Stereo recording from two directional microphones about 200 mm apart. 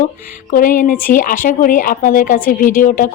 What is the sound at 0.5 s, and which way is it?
A woman's voice, 45° left (ahead or behind).